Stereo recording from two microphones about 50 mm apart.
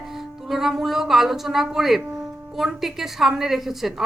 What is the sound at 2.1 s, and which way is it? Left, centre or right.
Music, centre.